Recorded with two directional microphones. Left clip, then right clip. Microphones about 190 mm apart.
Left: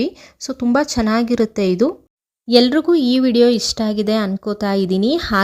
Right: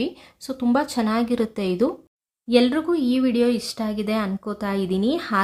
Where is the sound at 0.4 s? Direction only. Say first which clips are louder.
Left 5 dB; 30° left (ahead or behind).